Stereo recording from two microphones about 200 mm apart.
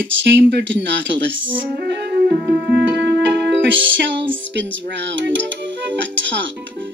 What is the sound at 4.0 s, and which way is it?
Music, 65° right (ahead or behind).